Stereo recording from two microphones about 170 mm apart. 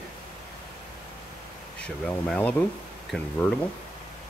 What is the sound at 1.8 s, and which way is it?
Speech, 5° left (ahead or behind).